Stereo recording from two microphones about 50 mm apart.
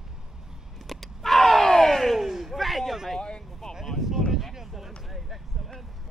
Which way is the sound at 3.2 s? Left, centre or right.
Centre.